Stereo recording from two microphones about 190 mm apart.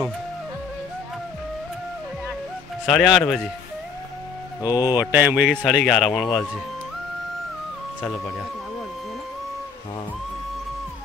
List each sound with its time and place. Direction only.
2.8 s speech: centre (ahead or behind)
4.6 s speech: 20° left (ahead or behind)
4.9 s speech: 10° right (ahead or behind)